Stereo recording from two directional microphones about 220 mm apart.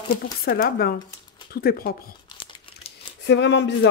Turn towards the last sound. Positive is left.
turn(degrees=50)  # may be behind; listen again after turning